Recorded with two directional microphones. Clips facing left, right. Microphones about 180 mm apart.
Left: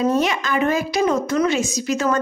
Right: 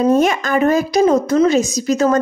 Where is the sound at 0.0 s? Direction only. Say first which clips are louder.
Right 5 dB; 50° right (ahead or behind).